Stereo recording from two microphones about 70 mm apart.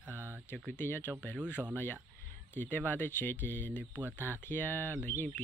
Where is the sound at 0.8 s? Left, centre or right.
Left.